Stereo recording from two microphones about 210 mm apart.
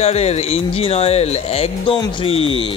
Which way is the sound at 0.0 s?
30° left (ahead or behind).